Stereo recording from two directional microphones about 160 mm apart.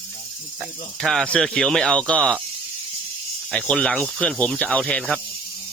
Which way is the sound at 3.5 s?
5° left (ahead or behind).